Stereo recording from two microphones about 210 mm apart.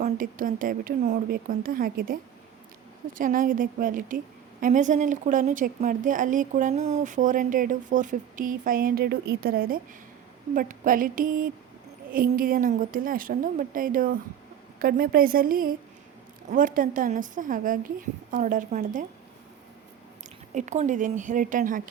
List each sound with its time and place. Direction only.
0.0 s a woman's voice: 40° right (ahead or behind)
3.2 s a woman's voice: 40° right (ahead or behind)
20.5 s a woman's voice: 35° right (ahead or behind)